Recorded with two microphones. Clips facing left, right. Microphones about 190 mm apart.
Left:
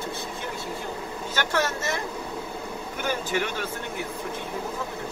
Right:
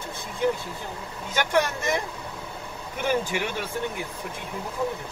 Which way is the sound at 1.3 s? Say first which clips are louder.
Right 3 dB; 15° right (ahead or behind).